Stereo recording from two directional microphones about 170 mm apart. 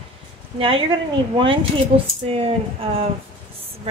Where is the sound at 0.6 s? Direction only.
30° right (ahead or behind).